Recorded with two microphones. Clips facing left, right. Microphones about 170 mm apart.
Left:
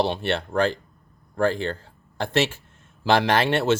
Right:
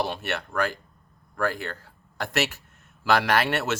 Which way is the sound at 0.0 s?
30° left (ahead or behind).